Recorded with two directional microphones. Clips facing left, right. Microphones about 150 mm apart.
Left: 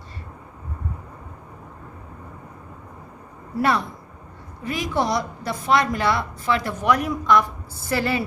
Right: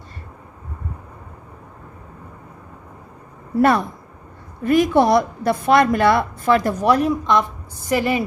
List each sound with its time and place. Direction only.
3.6 s a woman's voice: 50° right (ahead or behind); by 8.2 s 15° right (ahead or behind)